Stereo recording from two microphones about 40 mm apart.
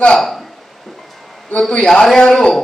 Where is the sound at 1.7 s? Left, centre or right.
Centre.